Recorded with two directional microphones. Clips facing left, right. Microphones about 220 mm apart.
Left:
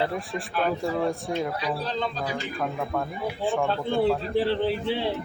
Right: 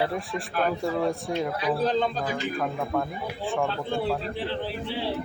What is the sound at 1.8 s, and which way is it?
Music, 45° right (ahead or behind).